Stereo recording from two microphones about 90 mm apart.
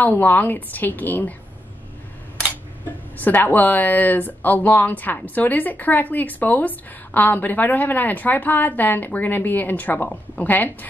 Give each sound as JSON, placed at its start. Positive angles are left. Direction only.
{"t": 0.0, "sound": "a woman's voice", "side_deg": 20}
{"t": 3.2, "sound": "a woman's voice", "side_deg": 20}